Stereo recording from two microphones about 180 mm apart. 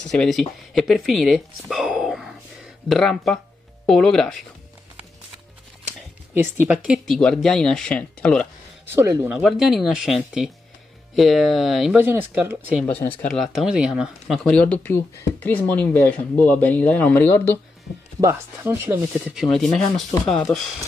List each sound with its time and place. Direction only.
0.0 s speech: 5° left (ahead or behind)
1.7 s whispering: 5° right (ahead or behind)
2.9 s speech: centre (ahead or behind)
6.3 s speech: 10° right (ahead or behind); by 8.5 s 5° left (ahead or behind)
8.9 s speech: 15° right (ahead or behind)
9.3 s speech: centre (ahead or behind)
12.8 s speech: 10° left (ahead or behind)
18.2 s speech: 15° right (ahead or behind)
19.3 s speech: centre (ahead or behind)